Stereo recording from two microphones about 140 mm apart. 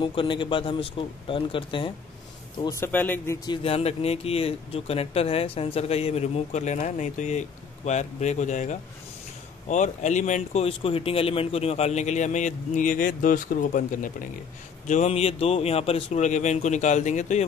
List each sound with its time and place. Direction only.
0.0 s speech: 35° left (ahead or behind)
2.6 s speech: 20° left (ahead or behind)
3.4 s speech: 45° left (ahead or behind); by 14.1 s 70° left (ahead or behind)
14.9 s speech: 50° left (ahead or behind)